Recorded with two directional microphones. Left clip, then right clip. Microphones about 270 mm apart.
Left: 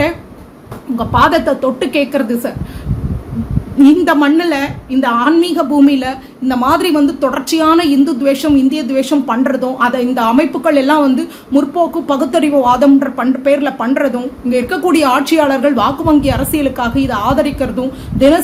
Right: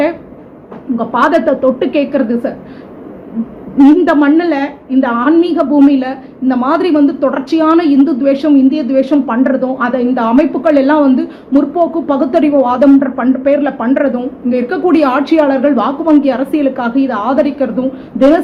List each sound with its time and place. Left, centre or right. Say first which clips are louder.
0.9 s a woman's voice: even; centre
3.8 s a woman's voice: right 1 dB; centre